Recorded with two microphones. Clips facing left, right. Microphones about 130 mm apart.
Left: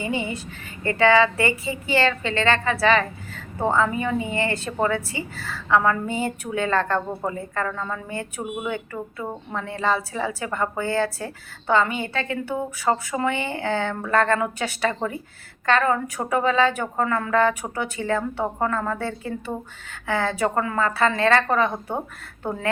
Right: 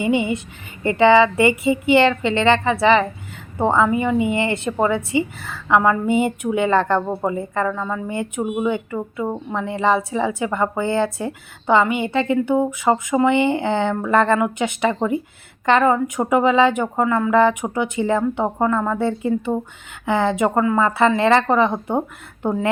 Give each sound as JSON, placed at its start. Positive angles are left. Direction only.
{"t": 0.0, "sound": "speech", "side_deg": -20}